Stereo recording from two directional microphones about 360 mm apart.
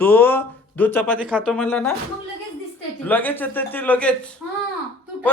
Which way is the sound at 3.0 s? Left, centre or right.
Centre.